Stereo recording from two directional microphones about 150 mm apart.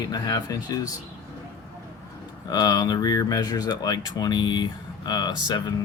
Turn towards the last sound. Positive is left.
turn(degrees=30)  # may be behind; listen again after turning